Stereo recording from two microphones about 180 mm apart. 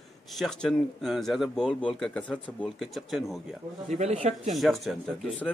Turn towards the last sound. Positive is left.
turn(degrees=0)  # may be behind; listen again after turning